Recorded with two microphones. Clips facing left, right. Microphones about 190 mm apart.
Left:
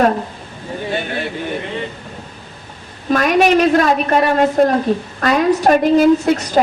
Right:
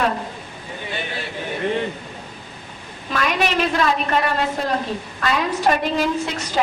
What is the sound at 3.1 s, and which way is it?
A woman's voice, 45° left (ahead or behind).